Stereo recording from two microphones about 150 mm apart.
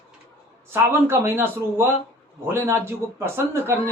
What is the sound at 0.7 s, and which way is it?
Speech, 15° right (ahead or behind).